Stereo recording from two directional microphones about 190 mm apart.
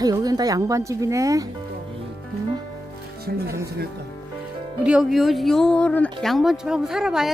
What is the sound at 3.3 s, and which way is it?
Speech, 55° right (ahead or behind).